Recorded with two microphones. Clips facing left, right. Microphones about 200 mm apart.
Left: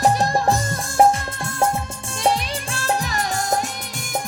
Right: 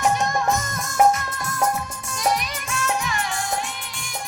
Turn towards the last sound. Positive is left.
turn(degrees=40)  # may be behind; listen again after turning